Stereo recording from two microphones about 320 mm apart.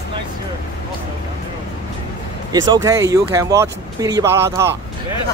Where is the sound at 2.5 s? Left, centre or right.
Centre.